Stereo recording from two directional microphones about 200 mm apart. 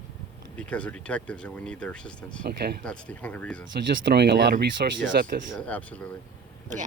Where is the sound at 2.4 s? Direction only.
55° right (ahead or behind).